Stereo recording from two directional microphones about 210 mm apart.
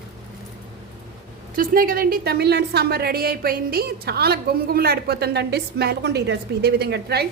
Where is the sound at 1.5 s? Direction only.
40° right (ahead or behind).